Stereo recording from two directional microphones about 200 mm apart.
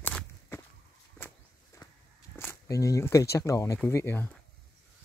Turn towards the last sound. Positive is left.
turn(degrees=10)  # may be behind; listen again after turning